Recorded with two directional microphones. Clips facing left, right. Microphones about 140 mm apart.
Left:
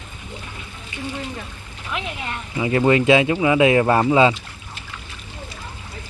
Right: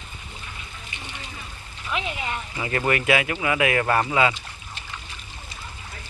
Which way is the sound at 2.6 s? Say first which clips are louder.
Left 8 dB; 15° left (ahead or behind).